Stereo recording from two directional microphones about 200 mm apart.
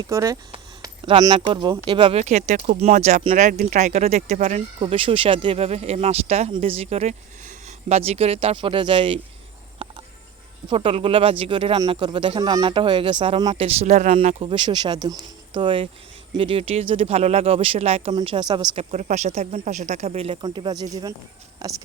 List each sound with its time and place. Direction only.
0.0 s speech: 15° right (ahead or behind)
9.8 s cricket: 25° right (ahead or behind)
10.7 s speech: 30° right (ahead or behind)